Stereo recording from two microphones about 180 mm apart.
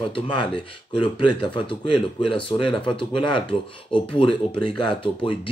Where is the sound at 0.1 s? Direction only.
25° left (ahead or behind).